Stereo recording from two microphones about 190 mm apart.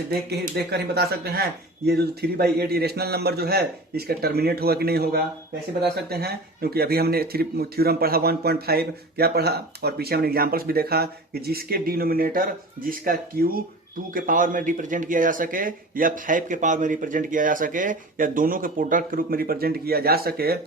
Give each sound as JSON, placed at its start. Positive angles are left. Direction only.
{"t": 0.1, "sound": "speech", "side_deg": -55}